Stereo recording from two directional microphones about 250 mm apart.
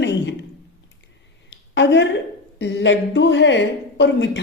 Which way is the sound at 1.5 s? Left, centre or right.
Left.